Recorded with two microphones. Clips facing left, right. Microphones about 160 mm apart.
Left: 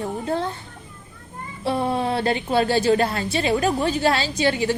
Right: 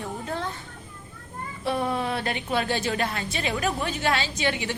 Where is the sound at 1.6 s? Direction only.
30° left (ahead or behind).